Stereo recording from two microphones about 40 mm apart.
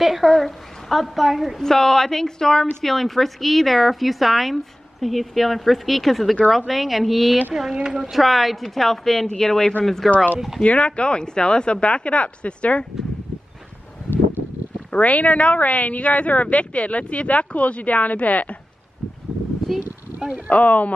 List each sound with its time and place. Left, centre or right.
0.0 s a woman's voice: centre
0.3 s a woman's voice: centre
1.6 s a woman's voice: centre
7.5 s speech: centre
8.0 s a woman's voice: centre
10.6 s a woman's voice: left
14.9 s a woman's voice: left
19.7 s a woman's voice: centre
20.4 s a woman's voice: left